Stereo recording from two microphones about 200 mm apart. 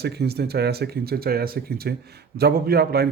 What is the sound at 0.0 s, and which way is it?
Speech, 55° right (ahead or behind).